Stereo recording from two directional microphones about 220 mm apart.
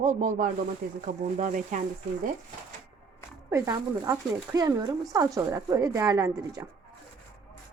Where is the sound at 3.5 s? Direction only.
15° right (ahead or behind).